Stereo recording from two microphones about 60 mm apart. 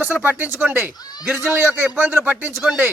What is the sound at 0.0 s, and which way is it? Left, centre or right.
A man's voice, right.